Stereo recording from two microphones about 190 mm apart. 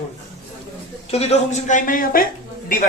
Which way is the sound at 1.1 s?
35° left (ahead or behind).